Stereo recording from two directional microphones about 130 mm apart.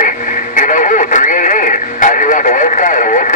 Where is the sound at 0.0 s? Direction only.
80° left.